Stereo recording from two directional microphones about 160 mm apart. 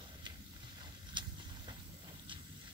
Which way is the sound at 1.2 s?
30° right (ahead or behind).